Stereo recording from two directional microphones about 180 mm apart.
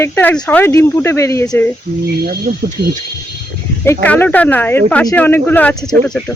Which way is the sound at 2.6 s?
50° right (ahead or behind).